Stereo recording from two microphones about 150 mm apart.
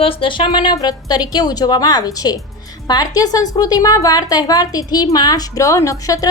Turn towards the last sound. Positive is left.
turn(degrees=20)  # may be behind; listen again after turning